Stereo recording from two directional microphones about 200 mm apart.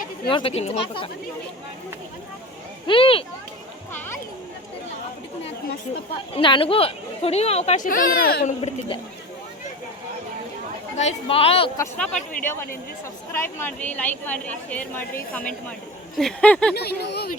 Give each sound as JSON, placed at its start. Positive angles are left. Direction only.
{"t": 0.3, "sound": "speech", "side_deg": 25}
{"t": 2.8, "sound": "speech", "side_deg": 25}
{"t": 6.3, "sound": "speech", "side_deg": 25}
{"t": 7.9, "sound": "a child's voice", "side_deg": 45}
{"t": 10.9, "sound": "speech", "side_deg": 30}
{"t": 11.8, "sound": "a woman's voice", "side_deg": 10}
{"t": 16.1, "sound": "a sound", "side_deg": 5}
{"t": 16.7, "sound": "a child's voice", "side_deg": 55}